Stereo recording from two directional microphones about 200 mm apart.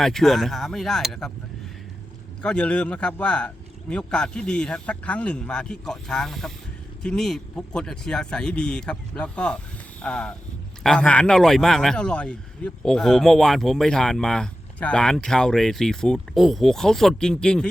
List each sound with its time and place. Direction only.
0.0 s speech: centre (ahead or behind)
2.4 s speech: 5° left (ahead or behind)